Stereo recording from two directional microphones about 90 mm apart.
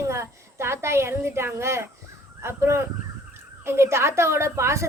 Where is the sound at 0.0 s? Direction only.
30° right (ahead or behind).